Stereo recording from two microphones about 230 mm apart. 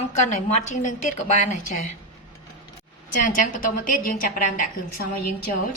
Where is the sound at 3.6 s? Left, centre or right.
Left.